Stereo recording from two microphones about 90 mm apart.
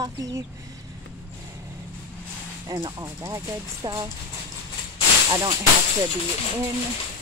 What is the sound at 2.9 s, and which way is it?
Speech, 30° right (ahead or behind).